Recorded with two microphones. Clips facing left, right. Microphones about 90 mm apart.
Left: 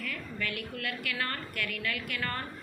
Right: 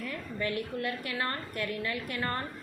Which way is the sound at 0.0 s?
25° right (ahead or behind).